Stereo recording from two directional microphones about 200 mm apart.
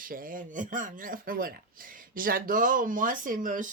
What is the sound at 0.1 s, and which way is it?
Speech, 45° right (ahead or behind).